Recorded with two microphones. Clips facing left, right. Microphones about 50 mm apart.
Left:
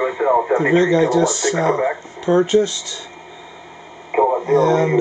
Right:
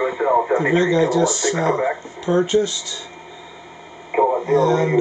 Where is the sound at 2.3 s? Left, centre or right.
Left.